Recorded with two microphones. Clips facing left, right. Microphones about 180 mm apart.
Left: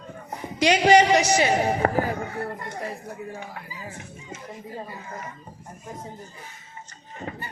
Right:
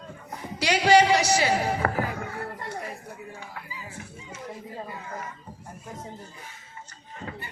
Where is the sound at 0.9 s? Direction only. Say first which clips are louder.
Left 1 dB; 20° left (ahead or behind).